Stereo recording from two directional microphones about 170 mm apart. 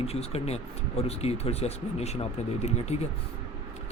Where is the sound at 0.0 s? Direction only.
35° left (ahead or behind).